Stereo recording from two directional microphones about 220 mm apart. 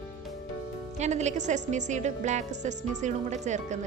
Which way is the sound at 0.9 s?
30° right (ahead or behind).